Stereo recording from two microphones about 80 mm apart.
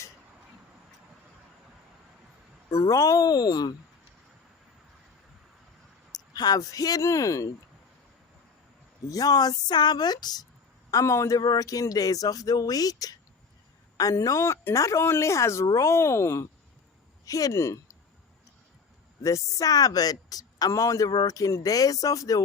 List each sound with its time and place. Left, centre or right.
2.6 s speech: left
6.3 s speech: left
9.0 s speech: left
10.9 s a woman's voice: left
11.3 s a woman's voice: left
17.2 s speech: left
19.2 s speech: left
21.1 s speech: left